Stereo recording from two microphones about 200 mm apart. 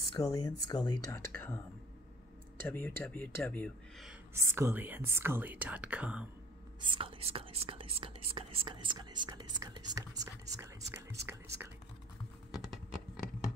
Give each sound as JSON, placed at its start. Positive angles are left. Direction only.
{"t": 0.1, "sound": "speech", "side_deg": 15}
{"t": 2.7, "sound": "speech", "side_deg": 10}
{"t": 4.5, "sound": "speech", "side_deg": -15}
{"t": 6.8, "sound": "speech", "side_deg": -25}
{"t": 12.7, "sound": "a sound", "side_deg": 0}